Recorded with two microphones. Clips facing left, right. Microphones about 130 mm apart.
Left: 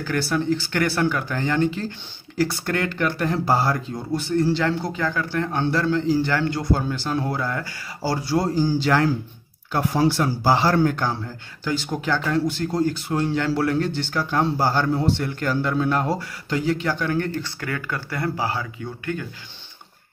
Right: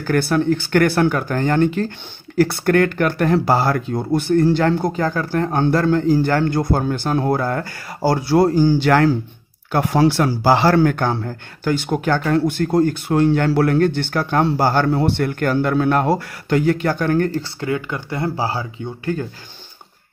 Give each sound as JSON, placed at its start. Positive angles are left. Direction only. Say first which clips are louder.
{"t": 0.0, "sound": "speech", "louder": "right 6 dB", "side_deg": -50}
{"t": 17.4, "sound": "speech", "louder": "right 6 dB", "side_deg": -25}